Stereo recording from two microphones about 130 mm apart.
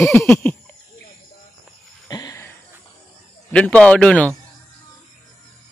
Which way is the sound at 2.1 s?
30° left (ahead or behind).